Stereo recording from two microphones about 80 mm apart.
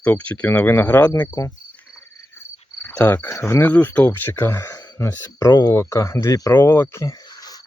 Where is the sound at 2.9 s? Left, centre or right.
Left.